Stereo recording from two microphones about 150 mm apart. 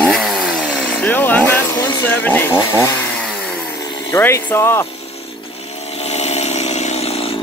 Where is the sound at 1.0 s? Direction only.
10° left (ahead or behind).